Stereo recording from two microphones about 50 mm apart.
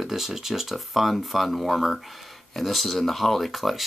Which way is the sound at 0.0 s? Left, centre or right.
Centre.